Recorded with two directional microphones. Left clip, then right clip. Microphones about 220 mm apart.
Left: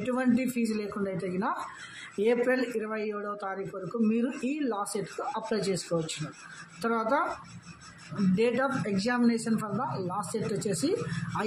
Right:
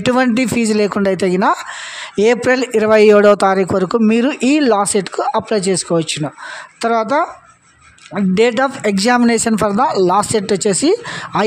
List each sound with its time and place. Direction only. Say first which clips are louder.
0.0 s speech: right 15 dB; 45° right (ahead or behind)
8.4 s speech: right 14 dB; 45° right (ahead or behind)